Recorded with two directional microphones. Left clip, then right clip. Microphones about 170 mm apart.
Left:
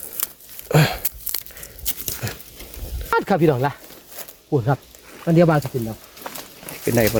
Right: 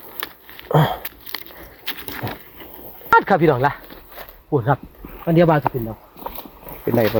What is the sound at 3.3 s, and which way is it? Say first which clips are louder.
Speech: right 3 dB; 15° left (ahead or behind).